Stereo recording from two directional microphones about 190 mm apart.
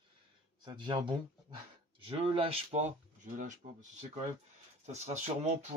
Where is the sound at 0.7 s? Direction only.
25° right (ahead or behind); by 3.5 s 40° right (ahead or behind).